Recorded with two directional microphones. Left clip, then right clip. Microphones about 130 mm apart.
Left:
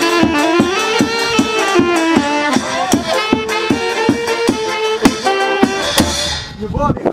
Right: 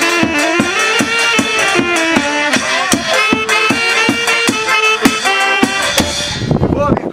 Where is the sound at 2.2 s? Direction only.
25° right (ahead or behind).